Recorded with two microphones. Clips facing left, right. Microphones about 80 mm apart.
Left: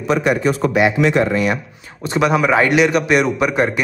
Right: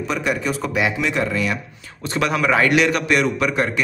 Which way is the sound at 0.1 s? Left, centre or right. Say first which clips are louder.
Left 7 dB; left.